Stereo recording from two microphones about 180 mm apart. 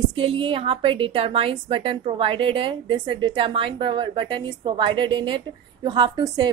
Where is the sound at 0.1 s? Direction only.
25° right (ahead or behind).